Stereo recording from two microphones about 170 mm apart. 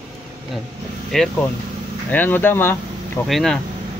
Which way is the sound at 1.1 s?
Centre (ahead or behind).